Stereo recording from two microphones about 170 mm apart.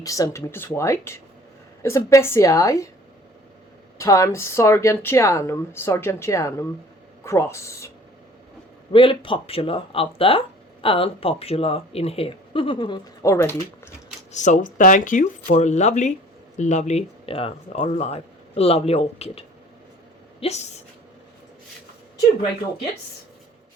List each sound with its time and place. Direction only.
0.0 s speech: 20° left (ahead or behind)
3.9 s speech: 20° left (ahead or behind)
8.9 s speech: 30° left (ahead or behind); by 13.9 s 15° left (ahead or behind)
14.3 s speech: 45° left (ahead or behind)